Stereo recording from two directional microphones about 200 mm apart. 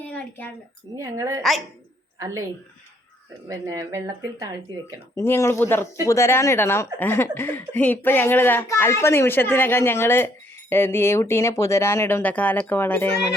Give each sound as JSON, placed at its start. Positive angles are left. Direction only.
{"t": 0.0, "sound": "a sound", "side_deg": 5}
{"t": 0.9, "sound": "speech", "side_deg": -15}
{"t": 1.4, "sound": "speech", "side_deg": 0}
{"t": 2.1, "sound": "speech", "side_deg": -15}
{"t": 3.5, "sound": "speech", "side_deg": -15}
{"t": 5.1, "sound": "speech", "side_deg": 15}